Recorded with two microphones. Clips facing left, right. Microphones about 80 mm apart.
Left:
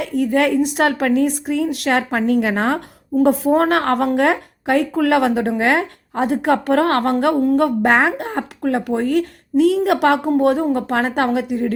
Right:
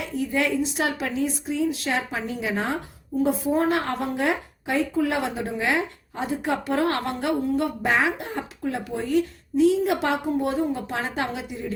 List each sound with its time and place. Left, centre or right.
0.0 s a woman's voice: left